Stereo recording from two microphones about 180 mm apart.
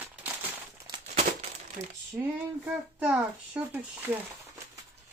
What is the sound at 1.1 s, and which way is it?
Crumpling, 40° right (ahead or behind).